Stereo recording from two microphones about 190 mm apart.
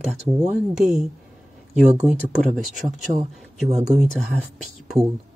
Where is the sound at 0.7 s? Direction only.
5° right (ahead or behind).